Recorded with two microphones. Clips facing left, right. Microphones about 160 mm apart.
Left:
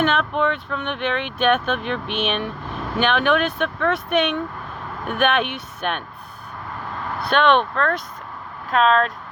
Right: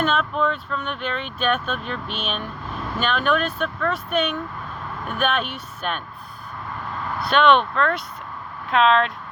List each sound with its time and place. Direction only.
0.0 s speech: 65° left (ahead or behind)
5.0 s speech: 60° left (ahead or behind)
7.2 s speech: 55° left (ahead or behind)